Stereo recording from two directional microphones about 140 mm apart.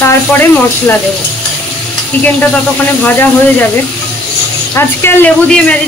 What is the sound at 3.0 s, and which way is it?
Speech, 15° left (ahead or behind).